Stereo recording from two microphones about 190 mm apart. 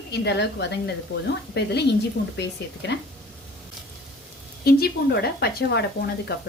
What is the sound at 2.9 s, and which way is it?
Speech, 60° left (ahead or behind).